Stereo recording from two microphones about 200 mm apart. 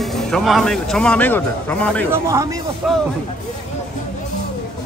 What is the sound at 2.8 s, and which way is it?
Speech, centre (ahead or behind).